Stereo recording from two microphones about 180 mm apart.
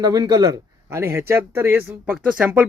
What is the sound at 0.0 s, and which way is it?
A man's voice, 20° right (ahead or behind).